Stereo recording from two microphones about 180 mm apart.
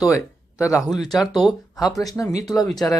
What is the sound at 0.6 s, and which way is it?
Speech, 15° left (ahead or behind).